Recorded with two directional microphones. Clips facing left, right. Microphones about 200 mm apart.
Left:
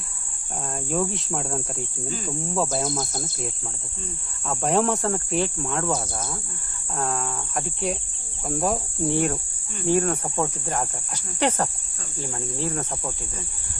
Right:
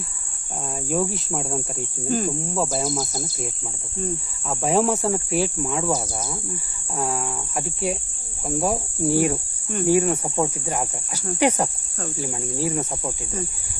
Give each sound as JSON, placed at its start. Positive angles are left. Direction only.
{"t": 0.7, "sound": "cricket", "side_deg": -5}
{"t": 2.0, "sound": "cricket", "side_deg": -50}
{"t": 2.6, "sound": "cricket", "side_deg": 0}